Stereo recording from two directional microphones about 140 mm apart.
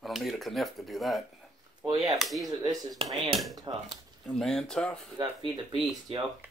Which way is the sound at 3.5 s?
30° right (ahead or behind).